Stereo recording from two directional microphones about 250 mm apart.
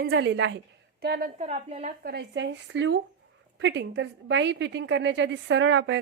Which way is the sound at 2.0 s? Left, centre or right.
Right.